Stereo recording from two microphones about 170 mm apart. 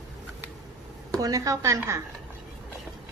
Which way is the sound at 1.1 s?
20° right (ahead or behind).